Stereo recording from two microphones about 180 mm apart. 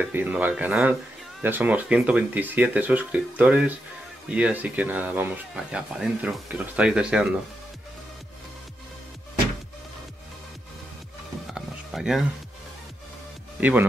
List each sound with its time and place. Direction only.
0.0 s speech: 10° right (ahead or behind)
11.5 s music: centre (ahead or behind)
13.6 s speech: 10° right (ahead or behind)